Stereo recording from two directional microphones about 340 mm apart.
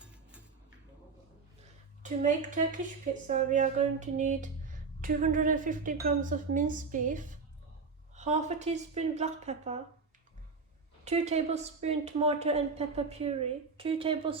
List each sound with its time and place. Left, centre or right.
0.0 s a sound: centre
2.2 s speech: right
11.0 s a woman's voice: centre